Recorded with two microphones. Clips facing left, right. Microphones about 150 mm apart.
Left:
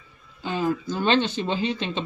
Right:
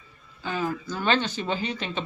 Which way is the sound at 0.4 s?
25° left (ahead or behind).